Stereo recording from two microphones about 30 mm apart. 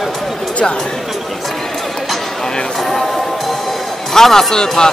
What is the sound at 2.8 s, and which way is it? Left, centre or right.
Music, centre.